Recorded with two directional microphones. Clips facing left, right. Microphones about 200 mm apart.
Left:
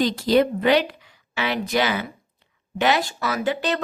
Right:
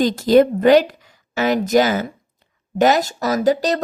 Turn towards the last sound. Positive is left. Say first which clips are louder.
# right 7 dB
turn(degrees=-40)  # may be behind; listen again after turning